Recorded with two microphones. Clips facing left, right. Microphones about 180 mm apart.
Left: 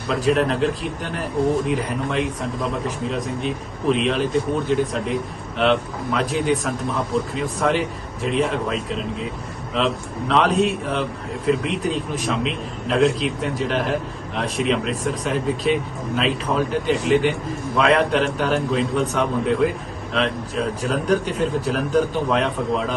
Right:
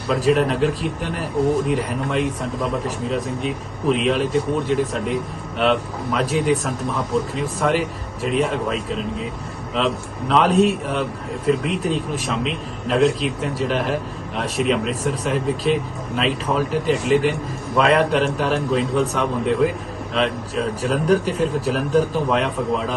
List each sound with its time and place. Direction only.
0.1 s a man's voice: centre (ahead or behind)
6.1 s a man's voice: centre (ahead or behind)